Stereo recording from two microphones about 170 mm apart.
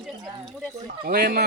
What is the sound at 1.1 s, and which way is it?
Speech, 70° right (ahead or behind).